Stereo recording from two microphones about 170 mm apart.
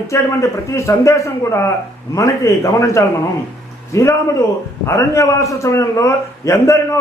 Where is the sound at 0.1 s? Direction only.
15° left (ahead or behind).